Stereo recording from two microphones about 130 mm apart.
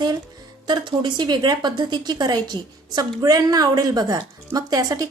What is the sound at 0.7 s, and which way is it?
A woman's voice, 35° right (ahead or behind).